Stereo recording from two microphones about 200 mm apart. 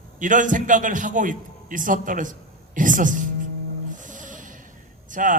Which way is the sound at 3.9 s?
40° right (ahead or behind).